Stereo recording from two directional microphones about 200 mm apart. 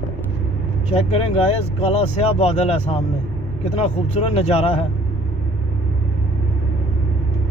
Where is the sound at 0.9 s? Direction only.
30° left (ahead or behind).